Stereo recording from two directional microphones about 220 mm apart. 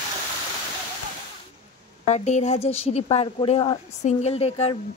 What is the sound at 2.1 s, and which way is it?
A woman's voice, 30° left (ahead or behind).